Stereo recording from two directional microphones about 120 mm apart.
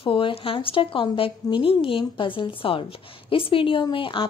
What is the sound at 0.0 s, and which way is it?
A woman's voice, 50° left (ahead or behind).